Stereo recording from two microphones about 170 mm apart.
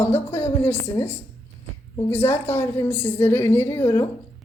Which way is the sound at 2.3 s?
15° left (ahead or behind).